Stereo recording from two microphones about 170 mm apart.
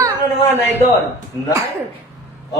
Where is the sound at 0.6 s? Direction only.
10° left (ahead or behind).